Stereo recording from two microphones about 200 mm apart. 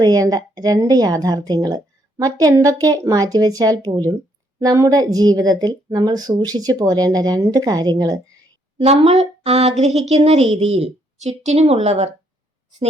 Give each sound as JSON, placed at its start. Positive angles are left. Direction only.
{"t": 0.0, "sound": "a woman's voice", "side_deg": -20}
{"t": 8.8, "sound": "a woman's voice", "side_deg": -30}